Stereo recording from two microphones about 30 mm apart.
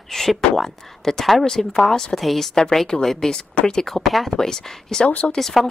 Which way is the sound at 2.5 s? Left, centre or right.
Left.